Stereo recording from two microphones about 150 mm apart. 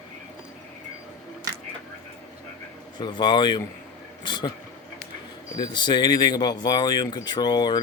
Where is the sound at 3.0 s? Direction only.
30° left (ahead or behind).